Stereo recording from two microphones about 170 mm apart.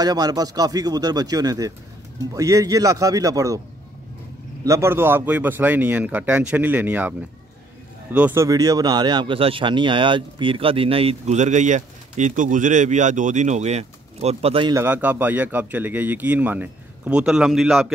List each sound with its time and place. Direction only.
0.0 s speech: 20° right (ahead or behind)
4.6 s speech: 15° right (ahead or behind); by 14.7 s 35° right (ahead or behind)
14.7 s speech: 15° right (ahead or behind)